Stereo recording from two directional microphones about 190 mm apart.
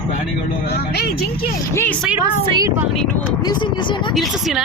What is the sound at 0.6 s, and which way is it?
Speech, 60° left (ahead or behind).